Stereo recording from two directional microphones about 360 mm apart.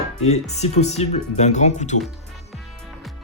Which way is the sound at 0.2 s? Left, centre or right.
Centre.